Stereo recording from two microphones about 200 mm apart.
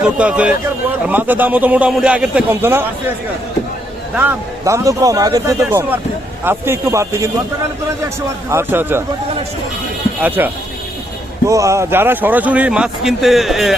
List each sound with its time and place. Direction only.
0.2 s a man's voice: 5° right (ahead or behind)
4.1 s a man's voice: 10° right (ahead or behind)
8.4 s a man's voice: 10° right (ahead or behind)
10.2 s a man's voice: 10° right (ahead or behind)